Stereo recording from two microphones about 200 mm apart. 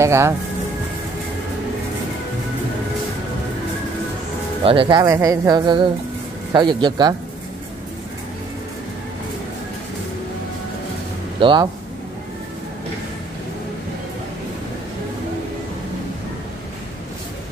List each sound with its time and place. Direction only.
0.0 s speech: 15° right (ahead or behind)
4.6 s speech: 25° right (ahead or behind)
11.3 s speech: 25° right (ahead or behind)